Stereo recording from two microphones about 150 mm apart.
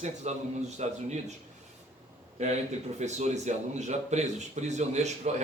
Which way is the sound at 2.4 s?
50° right (ahead or behind).